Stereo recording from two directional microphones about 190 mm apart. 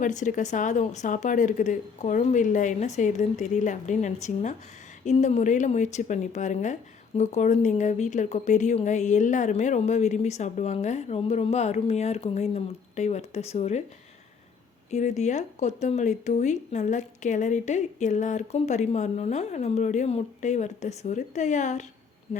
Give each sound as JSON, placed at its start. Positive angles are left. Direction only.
{"t": 0.0, "sound": "speech", "side_deg": 40}
{"t": 14.8, "sound": "speech", "side_deg": 35}